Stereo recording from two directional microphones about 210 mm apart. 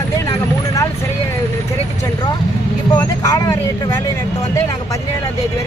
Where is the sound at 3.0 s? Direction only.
15° left (ahead or behind).